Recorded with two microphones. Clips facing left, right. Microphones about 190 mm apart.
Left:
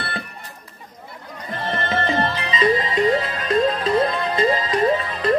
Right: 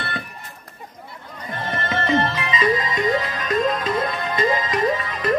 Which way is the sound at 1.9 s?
30° left (ahead or behind).